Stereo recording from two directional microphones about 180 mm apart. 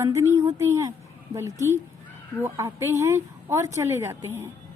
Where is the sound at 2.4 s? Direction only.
15° right (ahead or behind).